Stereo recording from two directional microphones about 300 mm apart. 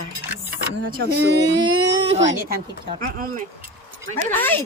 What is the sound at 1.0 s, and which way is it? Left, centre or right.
Speech, right.